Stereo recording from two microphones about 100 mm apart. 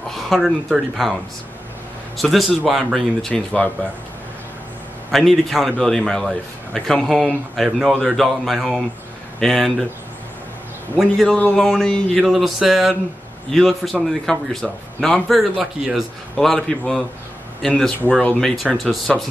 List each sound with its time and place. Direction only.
0.1 s speech: centre (ahead or behind)
2.1 s a man's voice: centre (ahead or behind)
5.1 s a man's voice: centre (ahead or behind)
11.2 s a man's voice: 10° left (ahead or behind); by 16.0 s 5° right (ahead or behind)
16.3 s a man's voice: 5° left (ahead or behind)